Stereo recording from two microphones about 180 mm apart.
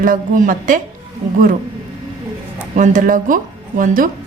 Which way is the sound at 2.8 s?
45° right (ahead or behind).